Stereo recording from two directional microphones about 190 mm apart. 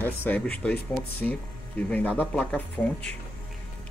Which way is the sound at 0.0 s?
10° left (ahead or behind).